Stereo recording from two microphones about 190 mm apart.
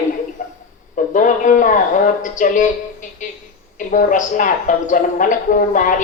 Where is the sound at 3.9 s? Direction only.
45° left (ahead or behind).